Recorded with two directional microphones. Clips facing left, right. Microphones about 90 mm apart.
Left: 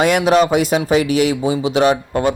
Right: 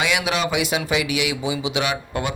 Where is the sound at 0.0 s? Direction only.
45° left (ahead or behind).